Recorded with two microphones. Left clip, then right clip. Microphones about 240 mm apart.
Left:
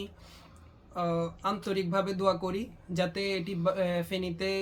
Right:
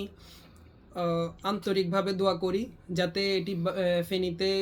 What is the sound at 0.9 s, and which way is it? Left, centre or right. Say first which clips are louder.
Speech: right 1 dB; centre.